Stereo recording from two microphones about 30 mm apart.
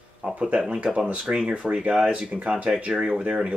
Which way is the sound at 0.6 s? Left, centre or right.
Right.